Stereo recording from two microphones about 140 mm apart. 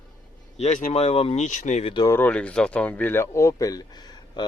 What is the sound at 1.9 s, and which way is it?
Speech, 25° left (ahead or behind).